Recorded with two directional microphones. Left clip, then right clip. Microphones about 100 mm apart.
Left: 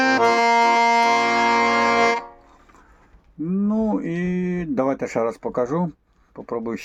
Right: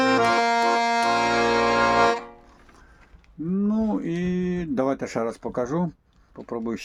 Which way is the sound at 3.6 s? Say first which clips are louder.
Left 3 dB; 15° right (ahead or behind).